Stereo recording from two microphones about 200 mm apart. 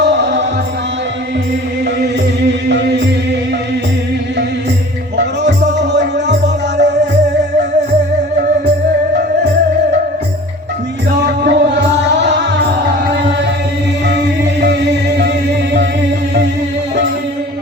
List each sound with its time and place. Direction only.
0.0 s music: 60° right (ahead or behind)
2.0 s music: 60° right (ahead or behind)
5.1 s music: 60° right (ahead or behind)
11.2 s music: 60° right (ahead or behind)
14.1 s music: 60° right (ahead or behind)